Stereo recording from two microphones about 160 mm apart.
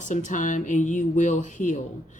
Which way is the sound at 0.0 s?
50° left (ahead or behind).